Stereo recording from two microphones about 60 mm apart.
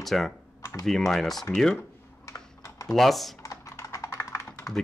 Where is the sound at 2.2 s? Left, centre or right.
Left.